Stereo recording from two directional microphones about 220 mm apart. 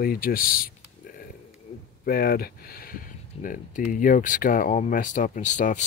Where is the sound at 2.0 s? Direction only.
40° left (ahead or behind).